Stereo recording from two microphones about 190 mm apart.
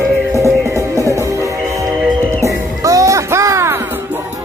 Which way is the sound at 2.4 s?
15° right (ahead or behind).